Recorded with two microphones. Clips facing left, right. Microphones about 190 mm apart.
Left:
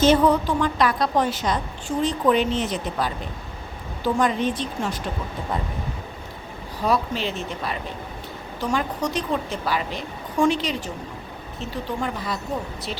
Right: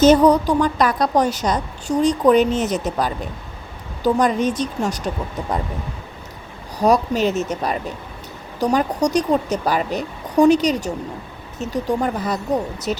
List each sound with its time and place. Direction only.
0.0 s speech: 40° right (ahead or behind)
6.7 s speech: 40° right (ahead or behind)